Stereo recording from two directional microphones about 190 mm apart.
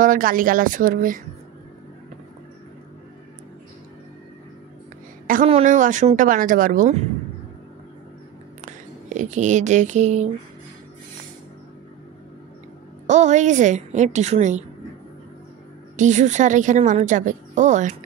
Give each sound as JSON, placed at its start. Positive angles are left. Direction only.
{"t": 0.0, "sound": "a woman's voice", "side_deg": -45}
{"t": 5.2, "sound": "a sound", "side_deg": -45}
{"t": 5.5, "sound": "a woman's voice", "side_deg": -40}
{"t": 9.1, "sound": "a woman's voice", "side_deg": -40}
{"t": 13.0, "sound": "a woman's voice", "side_deg": -40}
{"t": 16.0, "sound": "a woman's voice", "side_deg": -40}